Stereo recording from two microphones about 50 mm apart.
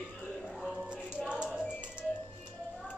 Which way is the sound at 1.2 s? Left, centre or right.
Centre.